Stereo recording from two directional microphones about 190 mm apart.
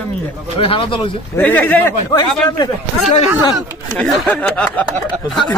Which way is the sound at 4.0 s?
5° left (ahead or behind).